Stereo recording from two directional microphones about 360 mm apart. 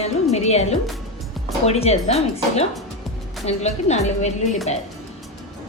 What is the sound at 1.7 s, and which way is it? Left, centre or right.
A woman's voice, centre.